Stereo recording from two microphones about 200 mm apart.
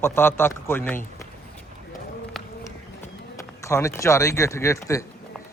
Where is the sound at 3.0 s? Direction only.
15° left (ahead or behind).